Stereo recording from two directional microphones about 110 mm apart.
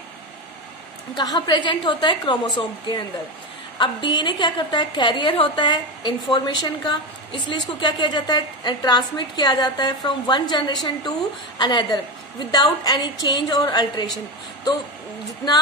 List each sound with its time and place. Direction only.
1.1 s a woman's voice: 40° left (ahead or behind)